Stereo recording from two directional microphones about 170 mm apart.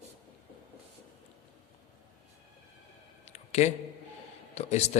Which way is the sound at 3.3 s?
40° left (ahead or behind).